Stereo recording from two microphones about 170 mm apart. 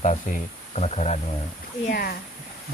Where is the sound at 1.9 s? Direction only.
65° left (ahead or behind).